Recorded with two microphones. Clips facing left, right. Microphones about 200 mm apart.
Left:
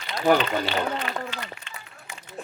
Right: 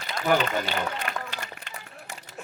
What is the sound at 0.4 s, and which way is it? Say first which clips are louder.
Run: left 2 dB; 45° right (ahead or behind).